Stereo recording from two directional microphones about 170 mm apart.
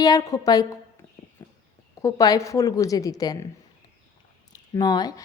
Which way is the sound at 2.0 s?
20° left (ahead or behind).